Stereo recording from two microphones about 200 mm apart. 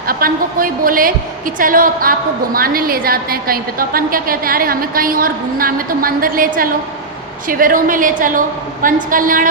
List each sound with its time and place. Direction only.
0.1 s a woman's voice: 45° right (ahead or behind)